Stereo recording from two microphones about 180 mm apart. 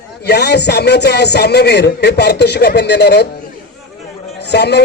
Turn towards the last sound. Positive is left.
turn(degrees=70)  # may be behind; listen again after turning